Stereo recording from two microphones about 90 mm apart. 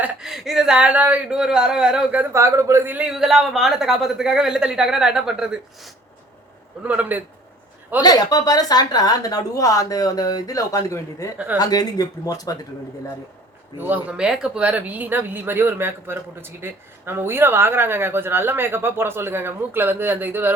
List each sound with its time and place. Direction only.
0.2 s speech: 5° right (ahead or behind)
2.3 s speech: 35° right (ahead or behind)
2.9 s a man's voice: 10° right (ahead or behind)
6.8 s speech: 15° right (ahead or behind)
8.0 s speech: 45° left (ahead or behind)
13.7 s speech: 20° right (ahead or behind)